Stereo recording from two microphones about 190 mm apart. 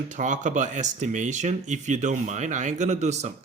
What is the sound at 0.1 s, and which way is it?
Speech, 40° right (ahead or behind).